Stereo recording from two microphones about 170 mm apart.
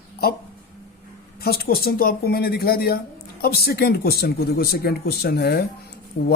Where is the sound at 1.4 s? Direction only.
65° left (ahead or behind).